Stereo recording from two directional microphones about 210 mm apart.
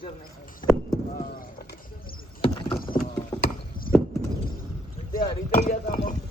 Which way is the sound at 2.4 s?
20° left (ahead or behind).